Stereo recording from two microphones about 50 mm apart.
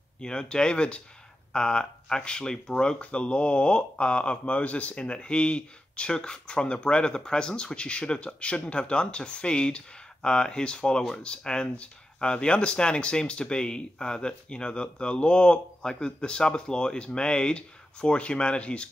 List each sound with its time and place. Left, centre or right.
0.2 s speech: centre